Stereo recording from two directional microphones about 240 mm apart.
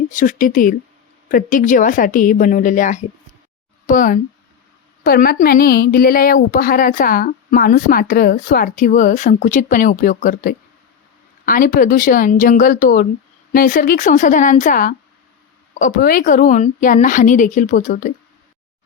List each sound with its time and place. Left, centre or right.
0.1 s a woman's voice: left